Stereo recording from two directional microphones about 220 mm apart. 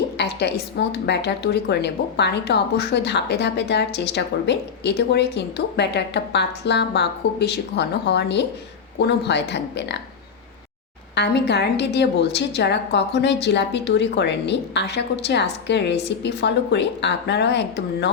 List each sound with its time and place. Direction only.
0.2 s a woman's voice: 50° left (ahead or behind)
11.1 s a woman's voice: 50° left (ahead or behind)